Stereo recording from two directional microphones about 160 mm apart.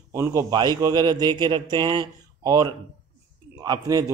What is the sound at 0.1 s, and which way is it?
Speech, 15° right (ahead or behind).